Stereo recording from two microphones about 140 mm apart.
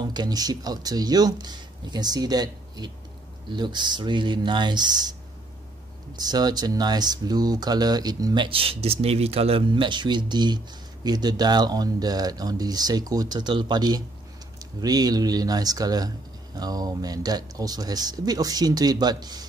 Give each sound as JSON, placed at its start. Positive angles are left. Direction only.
{"t": 0.0, "sound": "speech", "side_deg": -30}
{"t": 6.1, "sound": "speech", "side_deg": -30}
{"t": 8.5, "sound": "speech", "side_deg": -40}